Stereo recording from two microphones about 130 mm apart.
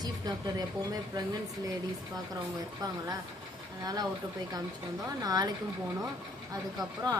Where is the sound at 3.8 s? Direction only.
30° right (ahead or behind).